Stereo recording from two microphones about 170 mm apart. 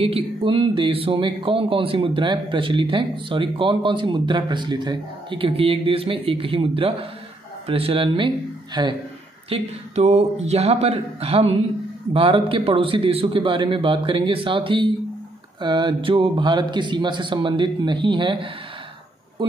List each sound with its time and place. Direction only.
0.0 s a man's voice: 30° right (ahead or behind)
9.5 s a man's voice: 40° right (ahead or behind)